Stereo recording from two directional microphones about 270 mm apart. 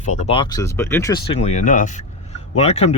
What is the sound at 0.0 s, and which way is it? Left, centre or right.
Speech, left.